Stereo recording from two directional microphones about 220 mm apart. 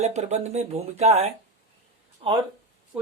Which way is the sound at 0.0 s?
30° right (ahead or behind).